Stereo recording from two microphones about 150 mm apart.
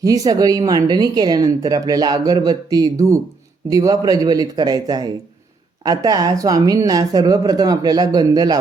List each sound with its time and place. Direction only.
0.0 s speech: 25° right (ahead or behind)